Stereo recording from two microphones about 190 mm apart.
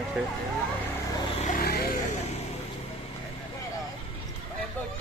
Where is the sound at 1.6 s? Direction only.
55° left (ahead or behind).